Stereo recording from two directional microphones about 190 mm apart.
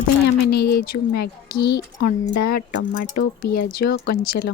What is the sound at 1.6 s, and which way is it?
Speech, 60° left (ahead or behind).